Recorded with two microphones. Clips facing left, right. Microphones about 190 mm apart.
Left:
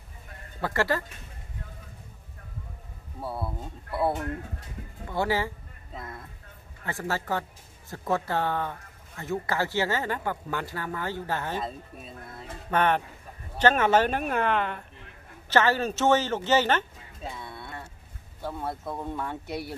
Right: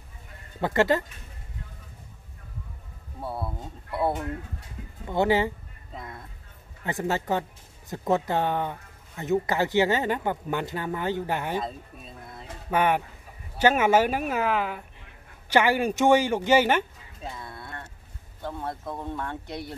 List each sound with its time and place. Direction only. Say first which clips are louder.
0.6 s speech: right 4 dB; 20° right (ahead or behind)
3.2 s speech: even; centre (ahead or behind)
5.1 s speech: right 5 dB; 20° right (ahead or behind)
5.9 s speech: even; centre (ahead or behind)
6.8 s speech: right 4 dB; 20° right (ahead or behind)
11.6 s speech: even; centre (ahead or behind)
12.7 s speech: right 1 dB; 10° right (ahead or behind)
17.2 s cattle: even; centre (ahead or behind)
18.4 s speech: even; 5° left (ahead or behind)